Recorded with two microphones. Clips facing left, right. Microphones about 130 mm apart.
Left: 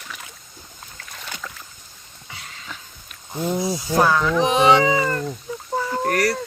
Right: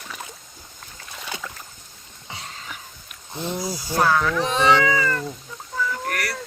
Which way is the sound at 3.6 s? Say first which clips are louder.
Left 3 dB; 25° left (ahead or behind).